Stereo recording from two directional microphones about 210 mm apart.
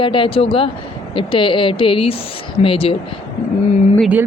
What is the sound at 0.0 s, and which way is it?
A woman's voice, 25° left (ahead or behind).